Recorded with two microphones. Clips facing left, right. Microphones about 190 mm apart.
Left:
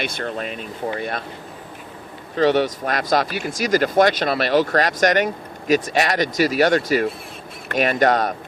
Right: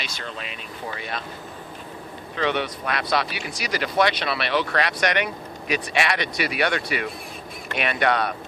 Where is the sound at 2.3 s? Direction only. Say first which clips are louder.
Left 8 dB; 40° left (ahead or behind).